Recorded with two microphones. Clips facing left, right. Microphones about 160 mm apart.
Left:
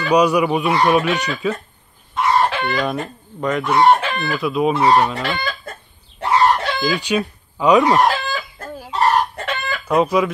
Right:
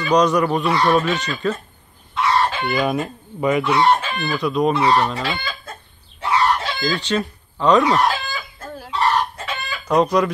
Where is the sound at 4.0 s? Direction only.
75° left (ahead or behind).